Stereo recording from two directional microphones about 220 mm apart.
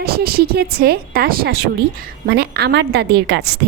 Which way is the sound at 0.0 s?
45° right (ahead or behind).